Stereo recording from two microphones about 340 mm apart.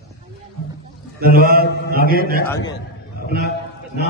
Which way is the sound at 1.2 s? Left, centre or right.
Right.